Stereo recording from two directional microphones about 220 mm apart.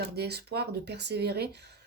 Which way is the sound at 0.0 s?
45° right (ahead or behind).